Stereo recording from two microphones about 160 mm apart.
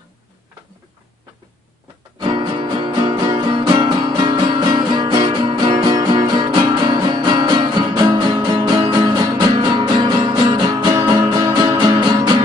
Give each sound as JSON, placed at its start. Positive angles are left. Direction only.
{"t": 2.1, "sound": "music", "side_deg": -30}